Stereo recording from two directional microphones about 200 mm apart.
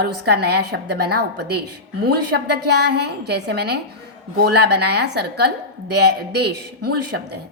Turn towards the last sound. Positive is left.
turn(degrees=-55)  # may be behind; listen again after turning